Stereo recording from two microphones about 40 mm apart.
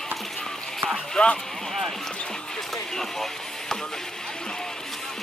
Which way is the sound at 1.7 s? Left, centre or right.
Centre.